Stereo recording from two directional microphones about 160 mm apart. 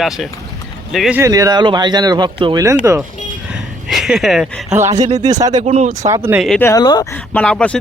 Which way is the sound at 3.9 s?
Centre (ahead or behind).